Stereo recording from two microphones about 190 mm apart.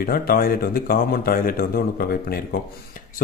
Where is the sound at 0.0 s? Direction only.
50° left (ahead or behind).